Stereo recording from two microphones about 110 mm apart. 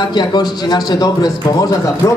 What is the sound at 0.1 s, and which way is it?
A man's voice, 40° left (ahead or behind).